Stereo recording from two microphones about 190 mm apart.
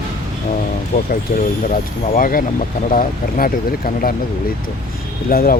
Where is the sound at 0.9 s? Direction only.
50° left (ahead or behind).